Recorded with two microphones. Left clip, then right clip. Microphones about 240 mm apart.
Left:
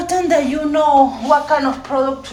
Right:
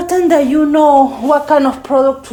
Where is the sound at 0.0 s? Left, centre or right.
Centre.